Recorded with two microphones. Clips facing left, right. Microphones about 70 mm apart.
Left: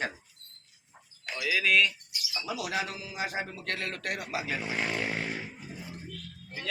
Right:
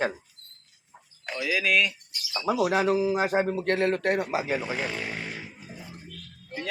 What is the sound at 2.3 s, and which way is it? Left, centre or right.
A man's voice, right.